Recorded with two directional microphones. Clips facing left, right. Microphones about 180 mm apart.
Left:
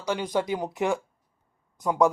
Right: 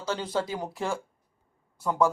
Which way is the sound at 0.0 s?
15° left (ahead or behind).